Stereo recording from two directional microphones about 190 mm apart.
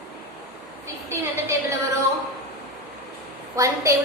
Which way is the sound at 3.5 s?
15° right (ahead or behind).